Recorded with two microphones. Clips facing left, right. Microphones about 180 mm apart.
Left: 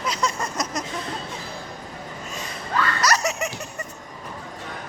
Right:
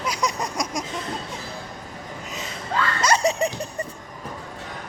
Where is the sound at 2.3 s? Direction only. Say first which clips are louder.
Even; 25° right (ahead or behind).